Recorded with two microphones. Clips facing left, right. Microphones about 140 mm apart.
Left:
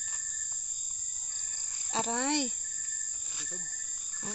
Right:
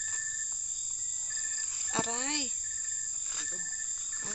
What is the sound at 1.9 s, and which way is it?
Speech, 40° left (ahead or behind).